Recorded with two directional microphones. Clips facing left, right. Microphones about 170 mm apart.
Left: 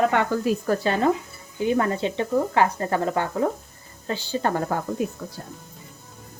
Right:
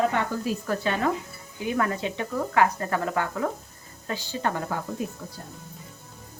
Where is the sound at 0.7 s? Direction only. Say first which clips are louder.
Left 4 dB; 35° left (ahead or behind).